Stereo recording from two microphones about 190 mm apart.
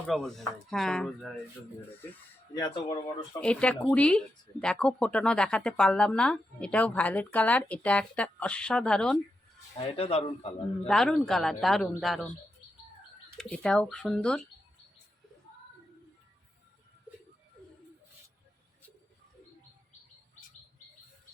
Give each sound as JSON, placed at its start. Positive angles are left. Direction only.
{"t": 0.1, "sound": "speech", "side_deg": 0}
{"t": 2.6, "sound": "speech", "side_deg": 20}
{"t": 3.4, "sound": "speech", "side_deg": 5}
{"t": 9.7, "sound": "speech", "side_deg": 30}
{"t": 10.8, "sound": "speech", "side_deg": 0}
{"t": 13.3, "sound": "speech", "side_deg": 5}